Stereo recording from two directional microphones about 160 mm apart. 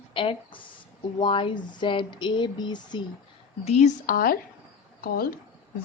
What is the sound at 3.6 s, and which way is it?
Speech, 45° left (ahead or behind).